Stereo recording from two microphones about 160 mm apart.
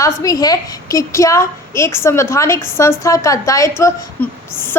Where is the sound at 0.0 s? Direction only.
20° left (ahead or behind).